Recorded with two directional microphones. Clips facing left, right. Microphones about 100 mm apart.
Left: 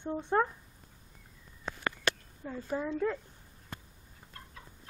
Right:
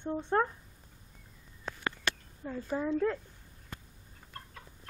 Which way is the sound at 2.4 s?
5° right (ahead or behind).